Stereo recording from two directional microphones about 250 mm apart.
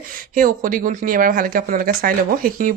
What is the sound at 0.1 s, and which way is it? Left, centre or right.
Speech, right.